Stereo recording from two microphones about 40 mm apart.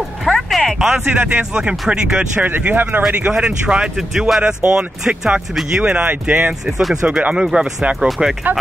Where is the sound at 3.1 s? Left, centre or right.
Right.